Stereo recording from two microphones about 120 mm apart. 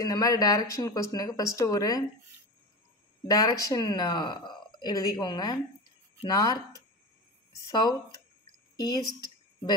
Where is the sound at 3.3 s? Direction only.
30° left (ahead or behind).